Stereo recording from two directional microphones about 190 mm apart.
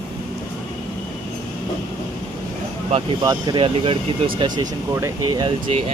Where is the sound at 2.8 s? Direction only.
30° right (ahead or behind).